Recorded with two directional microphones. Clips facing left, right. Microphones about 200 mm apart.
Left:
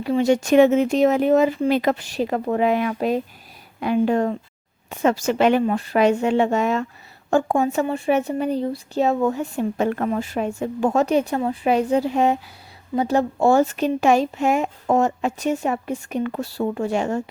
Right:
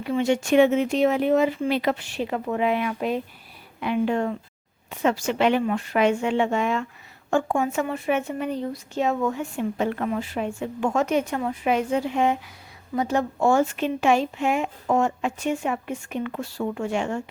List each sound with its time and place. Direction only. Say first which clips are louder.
0.0 s speech: left 4 dB; 35° left (ahead or behind)